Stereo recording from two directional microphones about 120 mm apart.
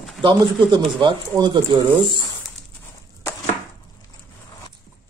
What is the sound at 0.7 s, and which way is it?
Speech, 40° right (ahead or behind).